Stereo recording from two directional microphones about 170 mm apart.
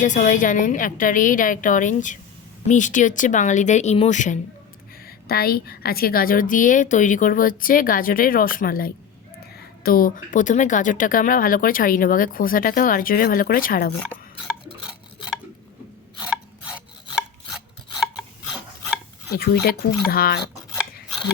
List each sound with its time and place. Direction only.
0.0 s a woman's voice: 45° left (ahead or behind)
5.0 s speech: 65° left (ahead or behind)
16.6 s rub: 5° right (ahead or behind)
20.1 s speech: 65° left (ahead or behind)